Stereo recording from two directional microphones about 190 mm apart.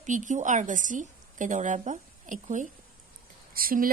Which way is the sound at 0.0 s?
40° right (ahead or behind).